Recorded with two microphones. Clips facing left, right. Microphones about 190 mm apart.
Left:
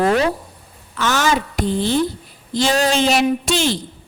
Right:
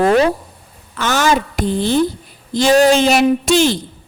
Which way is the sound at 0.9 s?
50° right (ahead or behind).